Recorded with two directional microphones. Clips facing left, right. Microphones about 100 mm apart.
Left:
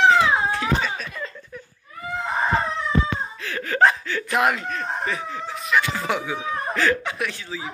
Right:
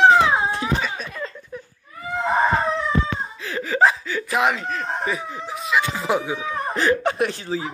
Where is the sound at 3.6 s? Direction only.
5° right (ahead or behind).